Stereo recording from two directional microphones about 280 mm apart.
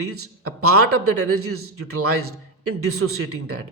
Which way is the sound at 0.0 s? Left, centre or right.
Right.